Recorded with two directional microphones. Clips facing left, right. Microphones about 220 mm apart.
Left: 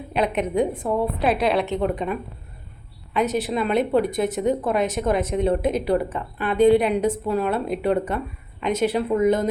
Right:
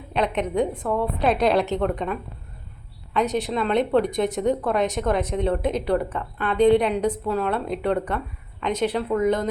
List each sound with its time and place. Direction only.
0.1 s speech: 10° left (ahead or behind)